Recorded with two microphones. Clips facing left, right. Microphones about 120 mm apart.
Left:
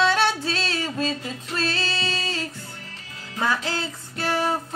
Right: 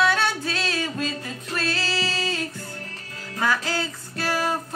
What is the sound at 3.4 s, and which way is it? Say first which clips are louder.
Child singing: right 1 dB; 20° left (ahead or behind).